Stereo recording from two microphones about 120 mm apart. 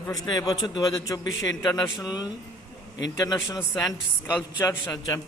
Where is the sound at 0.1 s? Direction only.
30° left (ahead or behind).